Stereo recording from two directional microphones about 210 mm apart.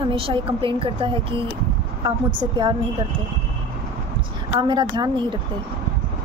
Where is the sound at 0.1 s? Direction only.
25° right (ahead or behind).